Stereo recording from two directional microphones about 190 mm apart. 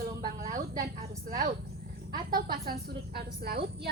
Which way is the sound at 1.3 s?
50° right (ahead or behind).